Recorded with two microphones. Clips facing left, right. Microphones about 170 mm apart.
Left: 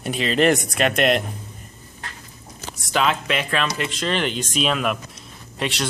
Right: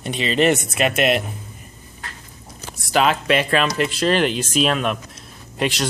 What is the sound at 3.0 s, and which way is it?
Speech, 40° right (ahead or behind).